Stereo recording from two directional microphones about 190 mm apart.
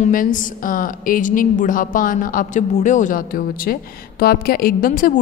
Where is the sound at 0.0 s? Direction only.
45° left (ahead or behind).